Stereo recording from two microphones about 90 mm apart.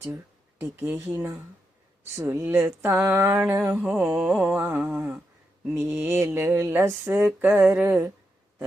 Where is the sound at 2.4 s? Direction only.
20° right (ahead or behind).